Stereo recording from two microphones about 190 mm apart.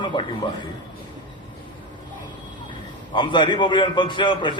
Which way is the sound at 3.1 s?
25° left (ahead or behind).